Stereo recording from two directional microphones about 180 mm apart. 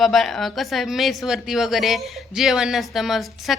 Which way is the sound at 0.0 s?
Centre (ahead or behind).